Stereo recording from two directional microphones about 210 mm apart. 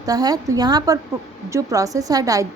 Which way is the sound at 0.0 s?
20° right (ahead or behind).